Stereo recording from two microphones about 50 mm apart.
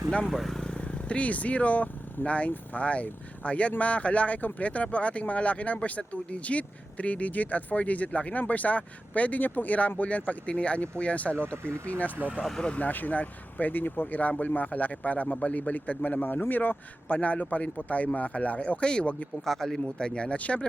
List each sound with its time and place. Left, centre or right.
0.3 s speech: centre
0.5 s vehicle: centre
0.8 s speech: left
11.5 s speech: right
11.9 s speech: left
19.5 s speech: centre
20.0 s speech: centre